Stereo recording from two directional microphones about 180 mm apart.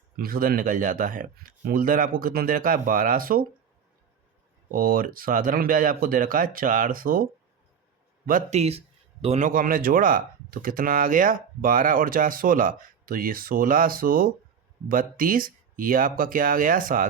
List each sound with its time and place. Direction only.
0.2 s speech: 55° right (ahead or behind)
4.7 s speech: 50° right (ahead or behind)
8.3 s speech: 45° right (ahead or behind)